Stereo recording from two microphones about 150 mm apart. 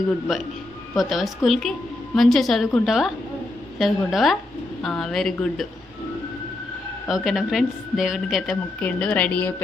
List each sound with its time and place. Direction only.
0.3 s a woman's voice: centre (ahead or behind)
7.1 s a woman's voice: centre (ahead or behind)